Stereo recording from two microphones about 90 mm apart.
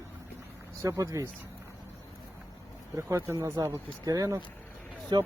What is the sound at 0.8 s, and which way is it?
Speech, 35° right (ahead or behind).